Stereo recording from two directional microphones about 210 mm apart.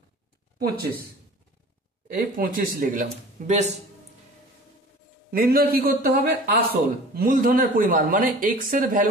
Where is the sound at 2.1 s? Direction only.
40° right (ahead or behind).